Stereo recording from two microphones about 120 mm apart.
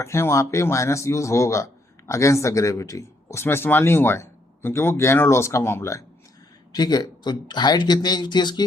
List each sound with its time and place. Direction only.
0.0 s speech: 25° left (ahead or behind)
6.7 s speech: 35° left (ahead or behind)